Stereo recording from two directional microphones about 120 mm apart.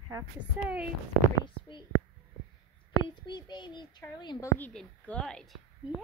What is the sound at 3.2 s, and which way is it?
Speech, 40° left (ahead or behind).